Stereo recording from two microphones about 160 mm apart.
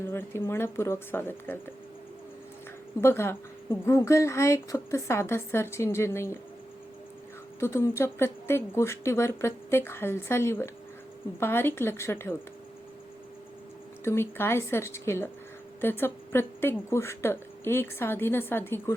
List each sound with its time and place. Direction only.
0.0 s speech: 15° left (ahead or behind)
3.0 s speech: 15° left (ahead or behind)
7.6 s speech: 15° left (ahead or behind)
14.0 s speech: 15° left (ahead or behind)